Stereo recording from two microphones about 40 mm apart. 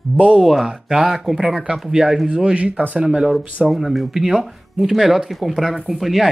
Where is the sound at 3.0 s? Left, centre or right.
Right.